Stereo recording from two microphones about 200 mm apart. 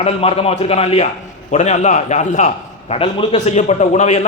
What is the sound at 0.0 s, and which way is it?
A man's voice, 30° left (ahead or behind).